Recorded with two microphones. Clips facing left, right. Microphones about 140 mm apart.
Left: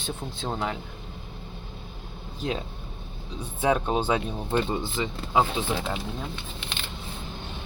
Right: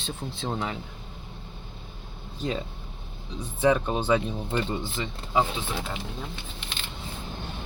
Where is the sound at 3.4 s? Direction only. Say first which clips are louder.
Right 2 dB; 5° left (ahead or behind).